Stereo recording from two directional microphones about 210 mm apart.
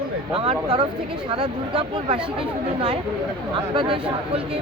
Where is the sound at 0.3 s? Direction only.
25° right (ahead or behind).